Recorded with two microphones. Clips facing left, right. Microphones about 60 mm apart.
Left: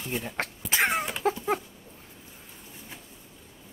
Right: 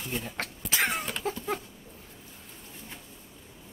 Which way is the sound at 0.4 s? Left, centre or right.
Left.